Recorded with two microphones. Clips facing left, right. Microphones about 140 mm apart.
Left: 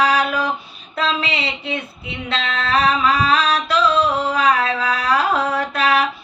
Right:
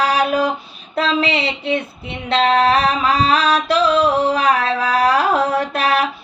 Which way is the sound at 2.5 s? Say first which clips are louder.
Even; 30° right (ahead or behind).